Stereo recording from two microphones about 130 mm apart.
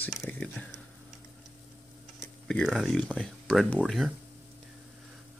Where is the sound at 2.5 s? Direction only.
Centre (ahead or behind).